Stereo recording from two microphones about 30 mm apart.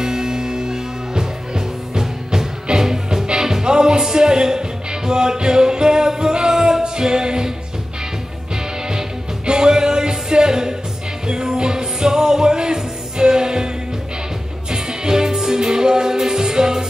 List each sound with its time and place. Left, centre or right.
0.0 s music: right
9.5 s music: right
14.7 s music: right